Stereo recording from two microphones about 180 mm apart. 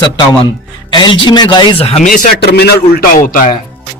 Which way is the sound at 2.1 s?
55° left (ahead or behind).